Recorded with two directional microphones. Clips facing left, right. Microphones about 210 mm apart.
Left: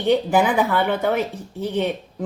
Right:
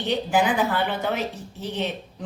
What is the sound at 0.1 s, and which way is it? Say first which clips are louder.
Speech: left 5 dB; 55° left (ahead or behind).